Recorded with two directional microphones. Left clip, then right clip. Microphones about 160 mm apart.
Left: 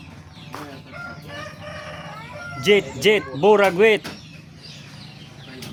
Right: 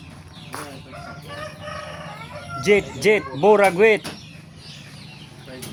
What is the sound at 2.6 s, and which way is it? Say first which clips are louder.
Speech: left 1 dB; 15° left (ahead or behind).